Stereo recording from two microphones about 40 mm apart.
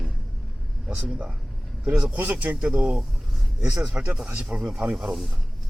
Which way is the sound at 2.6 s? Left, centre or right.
Right.